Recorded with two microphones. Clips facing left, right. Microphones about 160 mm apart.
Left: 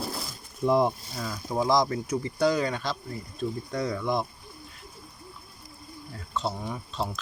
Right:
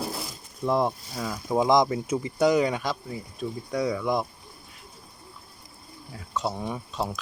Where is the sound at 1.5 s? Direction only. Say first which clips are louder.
Right 3 dB; 20° right (ahead or behind).